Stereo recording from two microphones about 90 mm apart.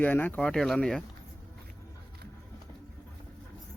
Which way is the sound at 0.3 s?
5° left (ahead or behind).